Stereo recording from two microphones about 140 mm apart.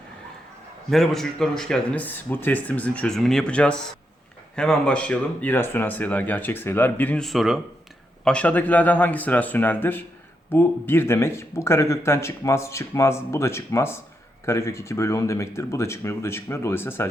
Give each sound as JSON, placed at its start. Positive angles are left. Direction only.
{"t": 0.9, "sound": "speech", "side_deg": 0}